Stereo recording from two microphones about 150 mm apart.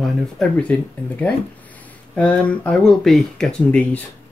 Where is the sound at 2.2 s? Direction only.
10° left (ahead or behind).